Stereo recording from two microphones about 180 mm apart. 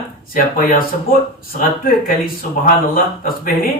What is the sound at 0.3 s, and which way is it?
Speech, 50° left (ahead or behind).